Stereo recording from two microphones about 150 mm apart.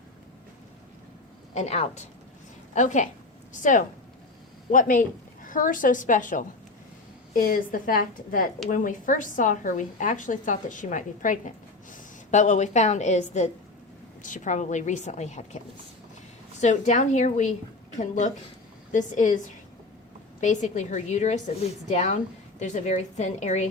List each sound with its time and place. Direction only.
1.5 s a woman's voice: 45° left (ahead or behind)
16.6 s a woman's voice: 50° left (ahead or behind)
20.4 s a woman's voice: 55° left (ahead or behind)